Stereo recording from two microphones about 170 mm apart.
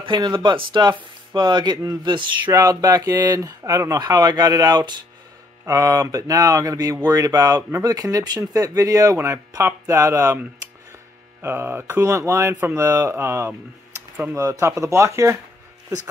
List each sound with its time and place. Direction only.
0.0 s speech: 25° right (ahead or behind)